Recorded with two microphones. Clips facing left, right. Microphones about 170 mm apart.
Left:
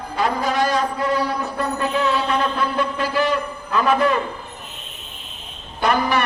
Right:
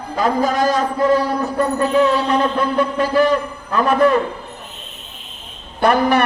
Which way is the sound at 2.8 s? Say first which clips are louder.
Right 7 dB; 50° right (ahead or behind).